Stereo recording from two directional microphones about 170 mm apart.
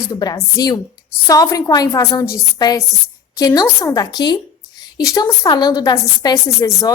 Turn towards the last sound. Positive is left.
turn(degrees=20)  # may be behind; listen again after turning